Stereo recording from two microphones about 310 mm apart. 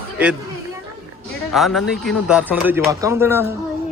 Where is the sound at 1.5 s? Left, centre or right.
Centre.